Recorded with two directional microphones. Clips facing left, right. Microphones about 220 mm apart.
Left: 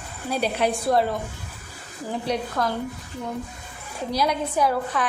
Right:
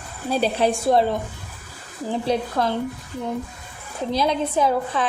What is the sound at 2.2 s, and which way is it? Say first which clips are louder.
Speech: right 3 dB; 30° right (ahead or behind).